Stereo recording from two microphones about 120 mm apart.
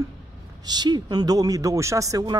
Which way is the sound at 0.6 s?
35° right (ahead or behind).